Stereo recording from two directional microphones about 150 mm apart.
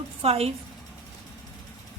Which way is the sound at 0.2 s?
40° right (ahead or behind).